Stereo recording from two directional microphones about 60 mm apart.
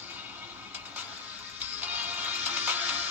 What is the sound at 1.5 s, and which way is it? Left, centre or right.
Music, right.